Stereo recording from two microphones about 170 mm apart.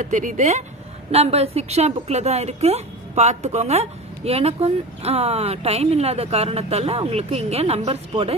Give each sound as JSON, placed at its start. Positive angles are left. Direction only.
{"t": 0.0, "sound": "a woman's voice", "side_deg": -50}